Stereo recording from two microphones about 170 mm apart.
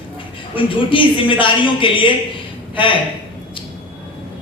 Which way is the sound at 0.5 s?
30° left (ahead or behind).